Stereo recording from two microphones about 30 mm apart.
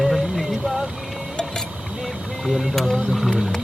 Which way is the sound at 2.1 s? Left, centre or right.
Centre.